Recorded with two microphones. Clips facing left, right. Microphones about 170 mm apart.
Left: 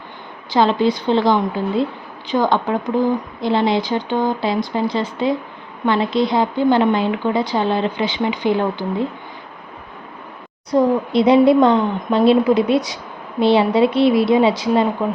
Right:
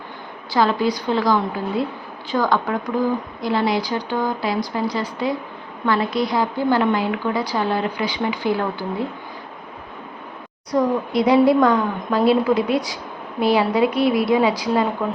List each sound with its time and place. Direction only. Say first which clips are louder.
0.5 s a woman's voice: left 3 dB; 25° left (ahead or behind)
10.7 s a woman's voice: left 4 dB; 25° left (ahead or behind)